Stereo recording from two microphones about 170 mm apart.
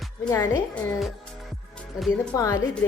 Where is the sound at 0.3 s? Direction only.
20° left (ahead or behind).